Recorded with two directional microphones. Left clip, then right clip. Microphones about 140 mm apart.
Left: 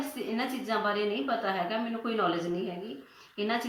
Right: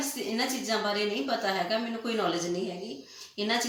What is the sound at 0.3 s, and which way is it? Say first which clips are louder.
A woman's voice: right 2 dB; 5° right (ahead or behind).